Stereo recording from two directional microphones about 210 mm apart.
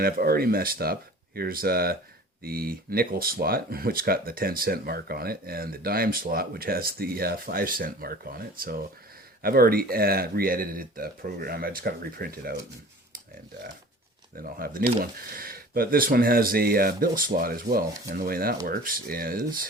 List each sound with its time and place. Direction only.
0.0 s speech: 45° right (ahead or behind)
14.3 s speech: 45° right (ahead or behind)